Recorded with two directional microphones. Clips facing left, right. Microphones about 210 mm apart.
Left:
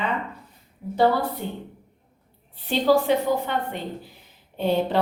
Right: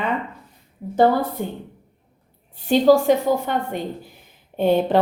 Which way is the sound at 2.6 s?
45° right (ahead or behind).